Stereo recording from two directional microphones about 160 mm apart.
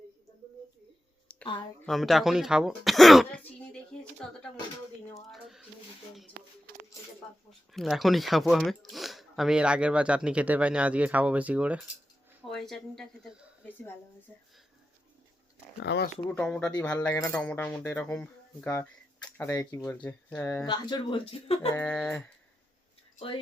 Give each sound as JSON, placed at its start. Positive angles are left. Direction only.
{"t": 1.9, "sound": "speech", "side_deg": 0}
{"t": 5.3, "sound": "speech", "side_deg": 0}
{"t": 7.7, "sound": "speech", "side_deg": 0}
{"t": 15.8, "sound": "speech", "side_deg": 90}
{"t": 16.3, "sound": "speech", "side_deg": 5}
{"t": 20.7, "sound": "speech", "side_deg": 30}
{"t": 21.7, "sound": "speech", "side_deg": 15}